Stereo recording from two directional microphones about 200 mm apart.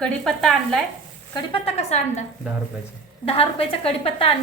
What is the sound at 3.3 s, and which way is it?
A woman's voice, 30° left (ahead or behind).